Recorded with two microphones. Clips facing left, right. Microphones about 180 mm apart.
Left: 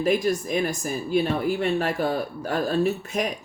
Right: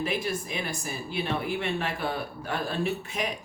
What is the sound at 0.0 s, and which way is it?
Speech, 40° left (ahead or behind).